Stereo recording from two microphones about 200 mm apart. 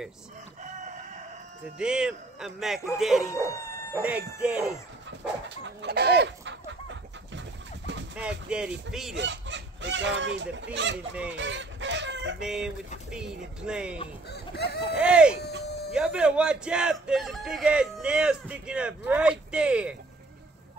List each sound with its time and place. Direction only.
1.8 s speech: 5° right (ahead or behind)
3.3 s dog: 15° left (ahead or behind)
3.9 s speech: 5° right (ahead or behind)
5.2 s chicken: 60° right (ahead or behind)
7.3 s bird: 65° right (ahead or behind)
8.2 s speech: 5° right (ahead or behind)
9.1 s speech: 65° right (ahead or behind)
11.3 s chicken: 65° right (ahead or behind)
12.4 s speech: 5° right (ahead or behind)
14.3 s speech: 55° left (ahead or behind)
15.0 s speech: 5° right (ahead or behind)